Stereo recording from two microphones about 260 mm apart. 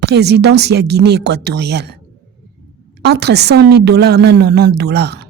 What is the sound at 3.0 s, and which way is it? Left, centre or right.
A woman's voice, right.